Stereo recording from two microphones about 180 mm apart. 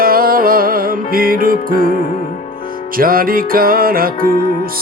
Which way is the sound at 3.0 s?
55° right (ahead or behind).